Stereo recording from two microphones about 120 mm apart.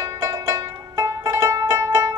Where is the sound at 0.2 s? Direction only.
25° right (ahead or behind).